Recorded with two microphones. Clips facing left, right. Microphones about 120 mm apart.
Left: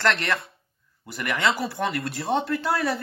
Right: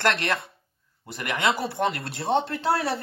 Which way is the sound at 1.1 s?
25° right (ahead or behind).